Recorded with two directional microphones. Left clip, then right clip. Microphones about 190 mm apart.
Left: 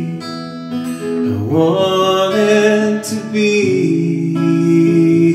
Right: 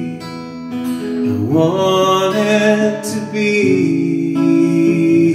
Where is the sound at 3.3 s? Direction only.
10° left (ahead or behind).